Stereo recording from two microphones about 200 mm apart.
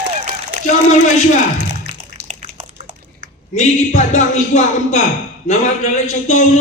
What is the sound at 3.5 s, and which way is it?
A man's voice, 35° left (ahead or behind).